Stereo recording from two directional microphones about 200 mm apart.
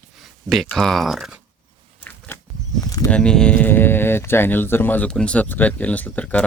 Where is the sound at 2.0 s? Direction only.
10° left (ahead or behind).